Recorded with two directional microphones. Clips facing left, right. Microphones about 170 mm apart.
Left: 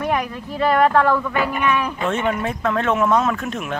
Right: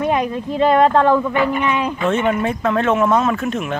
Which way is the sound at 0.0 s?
20° right (ahead or behind).